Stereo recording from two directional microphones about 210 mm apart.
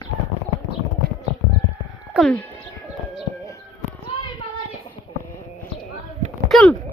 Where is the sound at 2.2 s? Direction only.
Centre (ahead or behind).